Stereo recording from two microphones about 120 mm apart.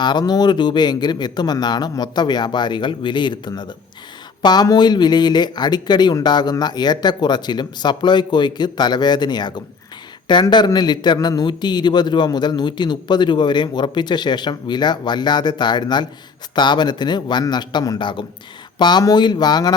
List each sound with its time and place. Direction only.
0.0 s a man's voice: 35° left (ahead or behind)